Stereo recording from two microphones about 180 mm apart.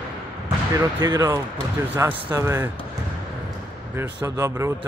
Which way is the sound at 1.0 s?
20° right (ahead or behind).